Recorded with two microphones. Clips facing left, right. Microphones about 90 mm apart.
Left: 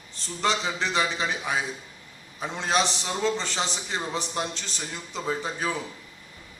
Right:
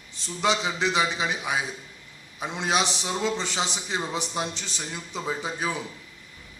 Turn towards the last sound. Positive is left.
turn(degrees=-10)  # may be behind; listen again after turning